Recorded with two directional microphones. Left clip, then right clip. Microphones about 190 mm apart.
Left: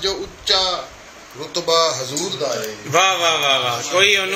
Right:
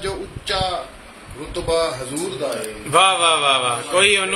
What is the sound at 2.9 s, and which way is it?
A man's voice, 10° right (ahead or behind).